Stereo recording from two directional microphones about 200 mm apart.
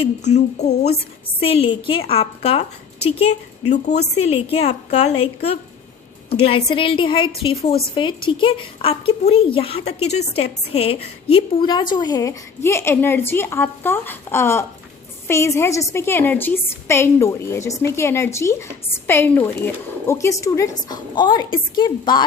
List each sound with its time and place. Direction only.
0.3 s a woman's voice: 35° left (ahead or behind)
3.8 s a woman's voice: 55° left (ahead or behind)
4.1 s a woman's voice: 30° left (ahead or behind)